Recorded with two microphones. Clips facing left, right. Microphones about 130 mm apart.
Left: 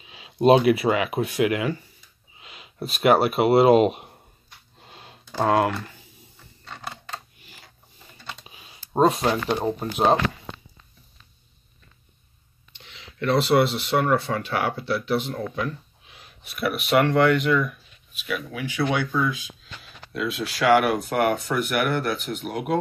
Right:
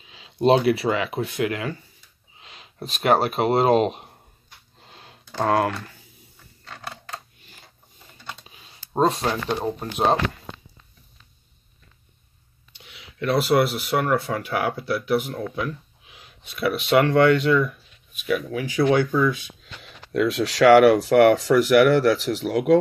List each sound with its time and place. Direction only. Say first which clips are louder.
0.0 s speech: left 1 dB; 15° left (ahead or behind)
4.8 s a sound: left 2 dB; 15° left (ahead or behind)
8.9 s speech: left 2 dB; 5° left (ahead or behind)
12.7 s speech: even; 10° right (ahead or behind)
16.5 s speech: right 2 dB; 25° right (ahead or behind)
18.2 s speech: right 5 dB; 35° right (ahead or behind)
19.8 s speech: right 7 dB; 70° right (ahead or behind)
21.5 s speech: right 8 dB; 90° right